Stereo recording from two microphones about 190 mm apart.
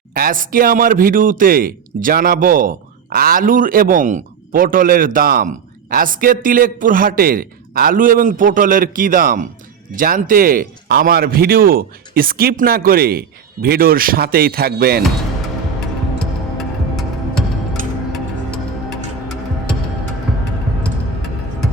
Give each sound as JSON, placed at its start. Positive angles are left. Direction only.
{"t": 0.1, "sound": "speech", "side_deg": -50}
{"t": 16.9, "sound": "music", "side_deg": 0}
{"t": 18.9, "sound": "music", "side_deg": 0}